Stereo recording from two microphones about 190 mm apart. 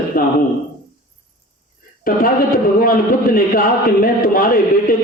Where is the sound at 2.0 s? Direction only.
50° left (ahead or behind).